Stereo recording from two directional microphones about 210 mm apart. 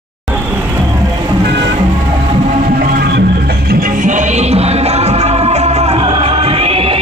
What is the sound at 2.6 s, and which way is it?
Music, 45° right (ahead or behind).